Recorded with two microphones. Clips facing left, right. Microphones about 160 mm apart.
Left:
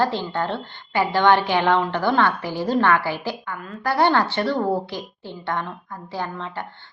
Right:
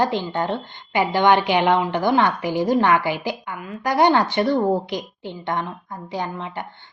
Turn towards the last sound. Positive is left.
turn(degrees=-15)  # may be behind; listen again after turning